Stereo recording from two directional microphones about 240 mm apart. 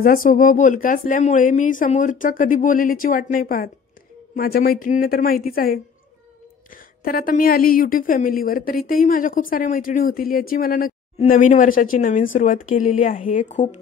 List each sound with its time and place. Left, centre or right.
0.0 s a woman's voice: left
7.1 s a woman's voice: left